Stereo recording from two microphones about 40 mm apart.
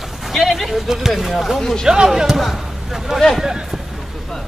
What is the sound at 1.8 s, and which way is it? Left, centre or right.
Speech, centre.